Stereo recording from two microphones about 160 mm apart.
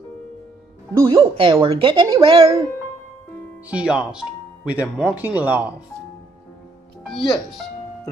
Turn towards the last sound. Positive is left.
turn(degrees=0)  # may be behind; listen again after turning